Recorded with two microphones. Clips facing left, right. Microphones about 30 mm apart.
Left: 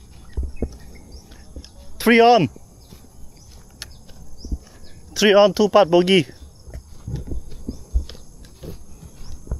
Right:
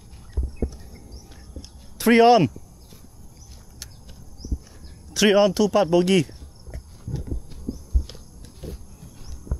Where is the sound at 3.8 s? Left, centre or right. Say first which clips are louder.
Left 5 dB; left.